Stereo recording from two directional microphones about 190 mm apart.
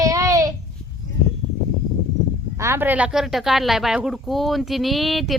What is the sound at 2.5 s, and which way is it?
Speech, 15° right (ahead or behind).